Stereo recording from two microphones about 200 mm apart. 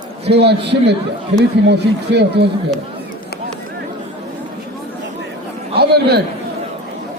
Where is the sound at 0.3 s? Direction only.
55° right (ahead or behind).